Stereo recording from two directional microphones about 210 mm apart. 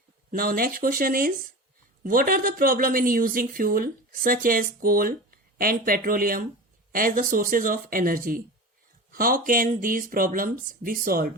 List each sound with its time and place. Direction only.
0.3 s speech: 45° right (ahead or behind)